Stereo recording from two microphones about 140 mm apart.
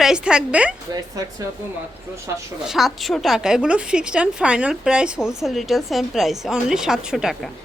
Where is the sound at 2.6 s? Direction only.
Centre (ahead or behind).